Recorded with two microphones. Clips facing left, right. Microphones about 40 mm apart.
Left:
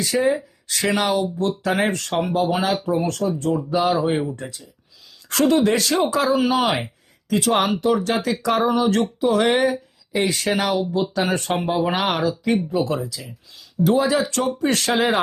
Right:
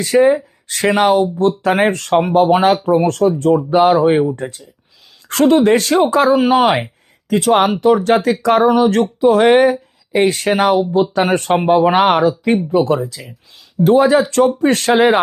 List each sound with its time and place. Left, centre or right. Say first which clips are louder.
0.0 s speech: right 8 dB; right
14.5 s speech: right 7 dB; right